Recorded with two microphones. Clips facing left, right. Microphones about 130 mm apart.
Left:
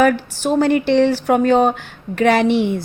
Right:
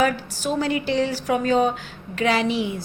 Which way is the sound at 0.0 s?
55° left (ahead or behind).